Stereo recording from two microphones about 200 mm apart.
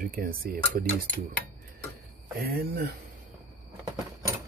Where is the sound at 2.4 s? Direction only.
50° right (ahead or behind).